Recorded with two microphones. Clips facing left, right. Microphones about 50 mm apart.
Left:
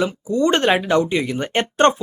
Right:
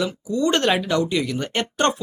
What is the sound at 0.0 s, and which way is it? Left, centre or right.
Speech, left.